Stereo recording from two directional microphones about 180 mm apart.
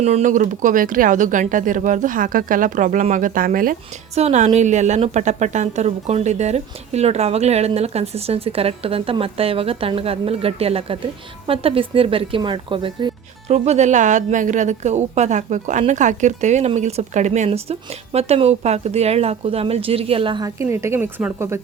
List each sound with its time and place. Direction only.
0.0 s speech: 40° right (ahead or behind)
4.1 s a woman's voice: 35° right (ahead or behind)
13.5 s a woman's voice: 40° right (ahead or behind)
20.6 s a woman's voice: 15° right (ahead or behind)